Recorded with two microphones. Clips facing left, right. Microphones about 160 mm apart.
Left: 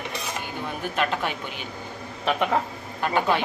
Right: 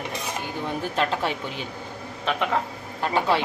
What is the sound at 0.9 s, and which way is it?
Speech, 30° right (ahead or behind).